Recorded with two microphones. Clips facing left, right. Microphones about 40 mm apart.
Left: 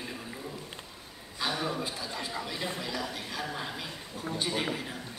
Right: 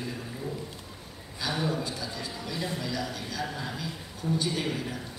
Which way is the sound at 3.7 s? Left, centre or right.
Left.